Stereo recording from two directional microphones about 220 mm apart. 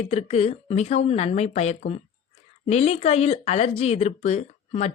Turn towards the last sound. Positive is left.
turn(degrees=30)  # may be behind; listen again after turning